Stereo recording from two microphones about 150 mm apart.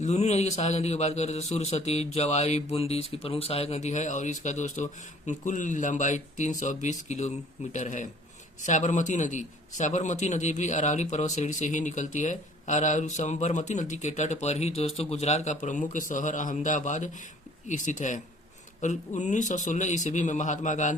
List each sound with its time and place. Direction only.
0.0 s a man's voice: 50° left (ahead or behind)